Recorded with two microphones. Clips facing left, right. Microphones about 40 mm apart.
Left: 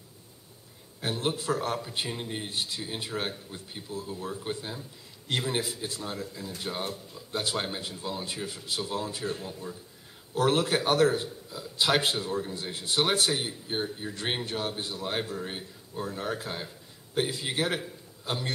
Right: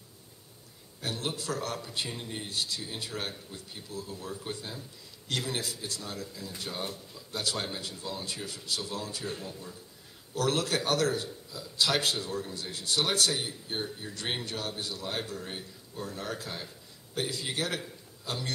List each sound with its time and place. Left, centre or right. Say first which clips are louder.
1.0 s a man's voice: left 5 dB; left